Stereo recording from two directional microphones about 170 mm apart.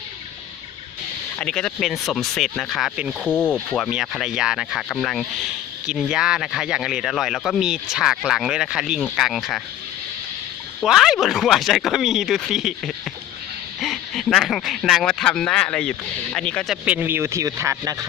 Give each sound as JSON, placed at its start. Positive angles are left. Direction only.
{"t": 1.4, "sound": "speech", "side_deg": 5}
{"t": 10.8, "sound": "speech", "side_deg": 0}
{"t": 16.8, "sound": "a man's voice", "side_deg": -10}